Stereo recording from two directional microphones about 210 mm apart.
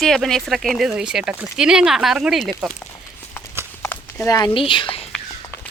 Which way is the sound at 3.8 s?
10° left (ahead or behind).